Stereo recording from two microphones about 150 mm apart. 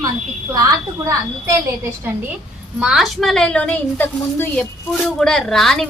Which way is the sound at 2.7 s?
5° right (ahead or behind).